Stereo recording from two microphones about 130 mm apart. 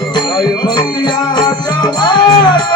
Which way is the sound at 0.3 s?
35° left (ahead or behind).